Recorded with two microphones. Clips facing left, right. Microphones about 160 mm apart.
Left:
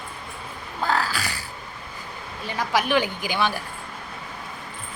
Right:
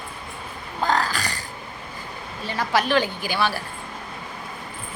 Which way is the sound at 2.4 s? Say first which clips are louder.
Right 1 dB; 10° left (ahead or behind).